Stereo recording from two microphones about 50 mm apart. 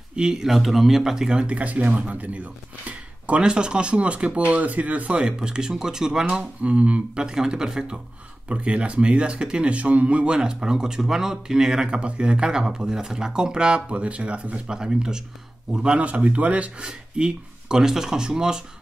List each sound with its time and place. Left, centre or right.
0.1 s speech: centre; by 2.5 s right
3.3 s speech: centre
5.2 s speech: centre
6.6 s speech: right
7.2 s speech: centre
17.1 s speech: centre